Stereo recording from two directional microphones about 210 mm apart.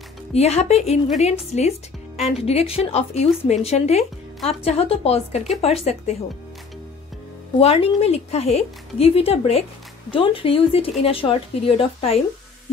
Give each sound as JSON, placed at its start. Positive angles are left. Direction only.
{"t": 0.3, "sound": "speech", "side_deg": 30}
{"t": 7.6, "sound": "speech", "side_deg": 30}